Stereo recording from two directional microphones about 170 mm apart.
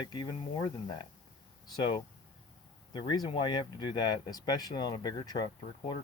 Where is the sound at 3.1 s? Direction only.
25° left (ahead or behind).